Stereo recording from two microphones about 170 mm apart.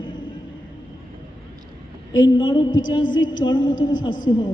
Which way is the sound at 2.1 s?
25° left (ahead or behind).